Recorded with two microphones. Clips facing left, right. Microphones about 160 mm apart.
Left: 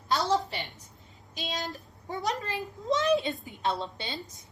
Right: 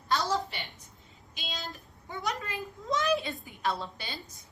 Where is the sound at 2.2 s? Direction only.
35° left (ahead or behind).